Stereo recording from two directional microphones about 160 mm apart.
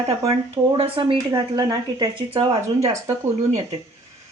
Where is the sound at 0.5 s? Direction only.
35° right (ahead or behind).